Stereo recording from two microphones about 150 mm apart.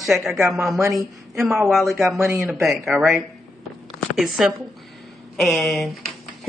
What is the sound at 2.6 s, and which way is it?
Speech, centre (ahead or behind).